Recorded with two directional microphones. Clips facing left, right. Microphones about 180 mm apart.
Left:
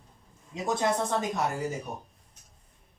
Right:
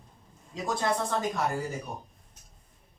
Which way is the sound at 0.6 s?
20° left (ahead or behind).